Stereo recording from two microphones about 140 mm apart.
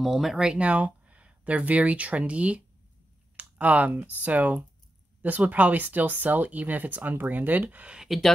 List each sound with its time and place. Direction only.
0.0 s speech: 5° right (ahead or behind)